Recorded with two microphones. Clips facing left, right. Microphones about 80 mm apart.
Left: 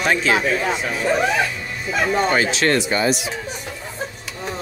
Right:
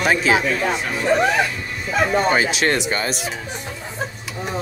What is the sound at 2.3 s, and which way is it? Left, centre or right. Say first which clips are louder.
Speech: left 1 dB; centre.